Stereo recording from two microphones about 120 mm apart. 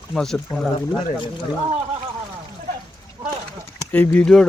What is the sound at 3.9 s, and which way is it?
Speech, 15° left (ahead or behind).